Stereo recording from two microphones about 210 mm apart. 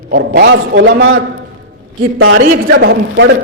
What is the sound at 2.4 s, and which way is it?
Speech, 55° right (ahead or behind).